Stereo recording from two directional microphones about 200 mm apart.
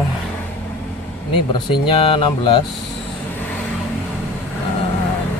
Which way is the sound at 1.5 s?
25° left (ahead or behind).